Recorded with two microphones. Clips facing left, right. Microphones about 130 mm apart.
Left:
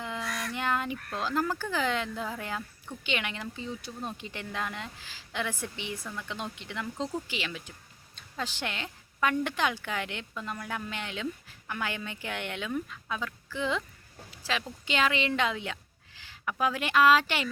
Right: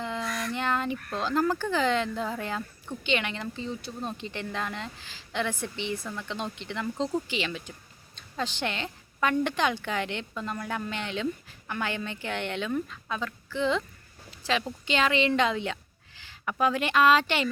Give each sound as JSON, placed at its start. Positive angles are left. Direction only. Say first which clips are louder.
{"t": 0.0, "sound": "a woman's voice", "louder": "right 3 dB", "side_deg": 5}
{"t": 14.3, "sound": "a sound", "louder": "right 5 dB", "side_deg": 5}
{"t": 14.8, "sound": "a woman's voice", "louder": "right 3 dB", "side_deg": 5}